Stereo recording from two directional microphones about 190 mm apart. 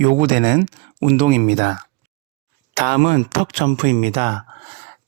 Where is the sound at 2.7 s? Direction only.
40° right (ahead or behind).